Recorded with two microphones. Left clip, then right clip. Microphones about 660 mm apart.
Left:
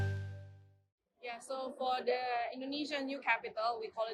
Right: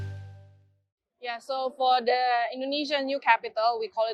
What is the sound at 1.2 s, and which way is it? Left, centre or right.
A woman's voice, right.